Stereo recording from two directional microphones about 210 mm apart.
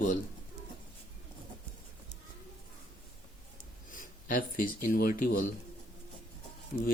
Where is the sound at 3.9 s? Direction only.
40° left (ahead or behind).